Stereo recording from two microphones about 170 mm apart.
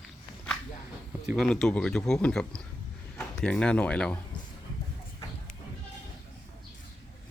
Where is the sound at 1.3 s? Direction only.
5° left (ahead or behind).